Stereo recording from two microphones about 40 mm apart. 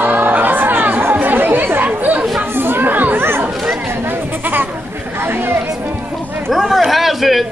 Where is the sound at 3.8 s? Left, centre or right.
Right.